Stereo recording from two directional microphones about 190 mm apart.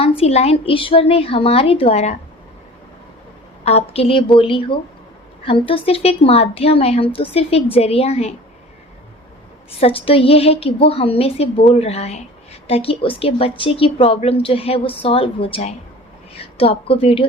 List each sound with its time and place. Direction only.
0.0 s speech: 30° left (ahead or behind)
3.6 s a woman's voice: 35° left (ahead or behind)
9.8 s a woman's voice: 30° left (ahead or behind)